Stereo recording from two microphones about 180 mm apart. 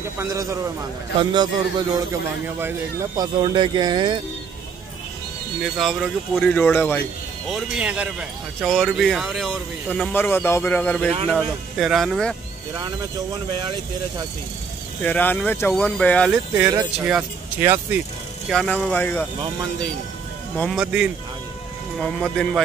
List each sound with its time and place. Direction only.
0.2 s a man's voice: 15° right (ahead or behind)
3.2 s speech: 25° right (ahead or behind)
5.6 s speech: centre (ahead or behind)
7.5 s speech: 5° right (ahead or behind)
13.6 s speech: 25° right (ahead or behind)
15.0 s speech: 10° left (ahead or behind)
17.0 s speech: 10° right (ahead or behind)
18.5 s speech: 5° left (ahead or behind)
20.7 s speech: 5° right (ahead or behind)